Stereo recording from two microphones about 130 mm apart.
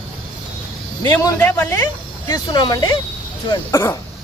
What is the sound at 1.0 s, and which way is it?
A man's voice, 25° left (ahead or behind).